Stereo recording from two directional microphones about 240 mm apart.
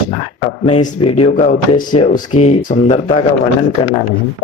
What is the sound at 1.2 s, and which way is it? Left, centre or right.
Speech, left.